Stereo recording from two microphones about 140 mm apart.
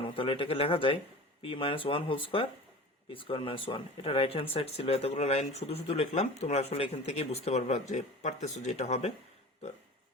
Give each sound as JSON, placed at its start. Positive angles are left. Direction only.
{"t": 0.0, "sound": "speech", "side_deg": 40}